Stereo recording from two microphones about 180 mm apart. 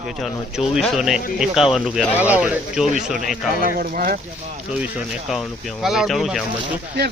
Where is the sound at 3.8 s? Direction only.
55° right (ahead or behind).